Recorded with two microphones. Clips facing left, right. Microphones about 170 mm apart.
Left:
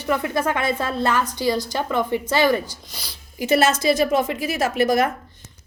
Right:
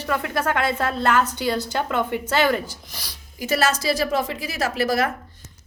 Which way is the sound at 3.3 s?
40° right (ahead or behind).